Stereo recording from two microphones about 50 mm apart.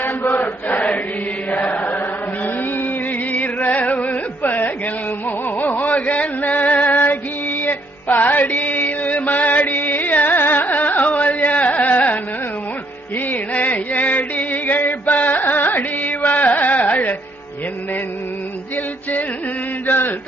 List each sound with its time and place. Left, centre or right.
0.3 s chant: left
2.4 s mantra: left
3.3 s music: left
19.9 s a sound: left